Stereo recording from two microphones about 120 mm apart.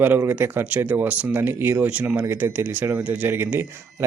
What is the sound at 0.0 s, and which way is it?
Speech, 20° right (ahead or behind).